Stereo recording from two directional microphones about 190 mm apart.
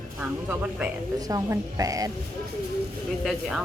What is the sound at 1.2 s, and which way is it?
Speech, 20° right (ahead or behind).